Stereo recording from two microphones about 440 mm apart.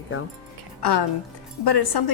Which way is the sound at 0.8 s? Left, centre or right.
Left.